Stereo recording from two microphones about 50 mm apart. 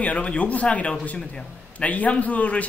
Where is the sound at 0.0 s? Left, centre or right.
Left.